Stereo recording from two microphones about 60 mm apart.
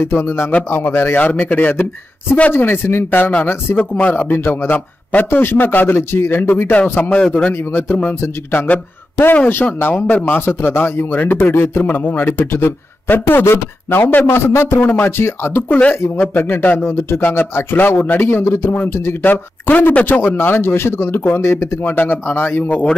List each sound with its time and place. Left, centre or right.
0.0 s a man's voice: left
1.1 s a man's voice: left
3.7 s a man's voice: left
6.7 s a man's voice: left
7.7 s a man's voice: left
9.9 s a man's voice: left
15.7 s a man's voice: left
18.2 s a man's voice: left
21.4 s a man's voice: left